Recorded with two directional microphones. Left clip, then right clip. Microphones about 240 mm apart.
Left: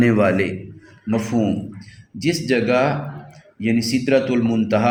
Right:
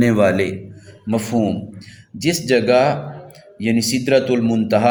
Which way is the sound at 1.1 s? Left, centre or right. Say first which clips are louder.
Right 2 dB; right.